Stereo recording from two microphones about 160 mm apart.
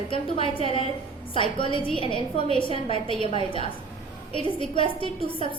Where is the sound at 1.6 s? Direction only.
30° left (ahead or behind).